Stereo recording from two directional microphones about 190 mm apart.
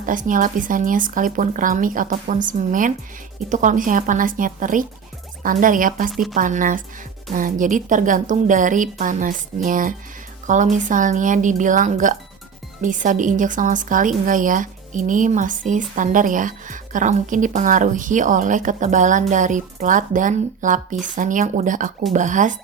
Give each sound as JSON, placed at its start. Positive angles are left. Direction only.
{"t": 0.0, "sound": "a woman's voice", "side_deg": -45}